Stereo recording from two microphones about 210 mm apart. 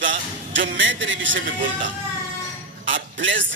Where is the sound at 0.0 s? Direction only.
65° right (ahead or behind).